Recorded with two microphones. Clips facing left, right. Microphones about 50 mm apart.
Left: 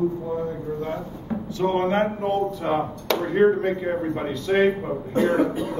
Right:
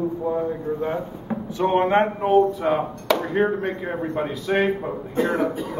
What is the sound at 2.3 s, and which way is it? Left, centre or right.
A man's voice, centre.